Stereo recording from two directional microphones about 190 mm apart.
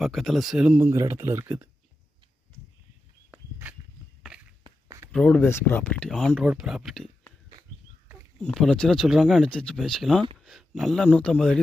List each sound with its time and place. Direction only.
0.0 s speech: centre (ahead or behind)
4.6 s a sound: 15° right (ahead or behind)
5.1 s speech: 5° left (ahead or behind)
8.4 s speech: centre (ahead or behind)